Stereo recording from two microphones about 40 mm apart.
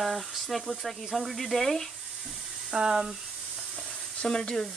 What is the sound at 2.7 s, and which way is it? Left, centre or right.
Speech, centre.